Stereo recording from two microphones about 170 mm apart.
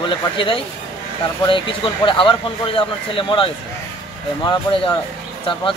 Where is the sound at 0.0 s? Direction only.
30° left (ahead or behind).